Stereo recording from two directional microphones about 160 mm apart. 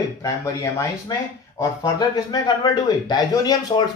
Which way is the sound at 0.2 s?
20° left (ahead or behind).